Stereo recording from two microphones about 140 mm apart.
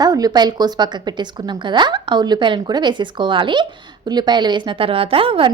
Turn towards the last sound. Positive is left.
turn(degrees=-40)  # may be behind; listen again after turning